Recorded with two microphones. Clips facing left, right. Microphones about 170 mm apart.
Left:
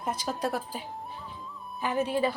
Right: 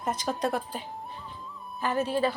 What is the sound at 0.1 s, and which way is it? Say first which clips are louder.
Speech: right 2 dB; 5° left (ahead or behind).